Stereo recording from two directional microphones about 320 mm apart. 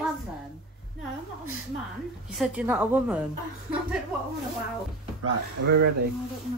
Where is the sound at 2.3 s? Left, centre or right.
Centre.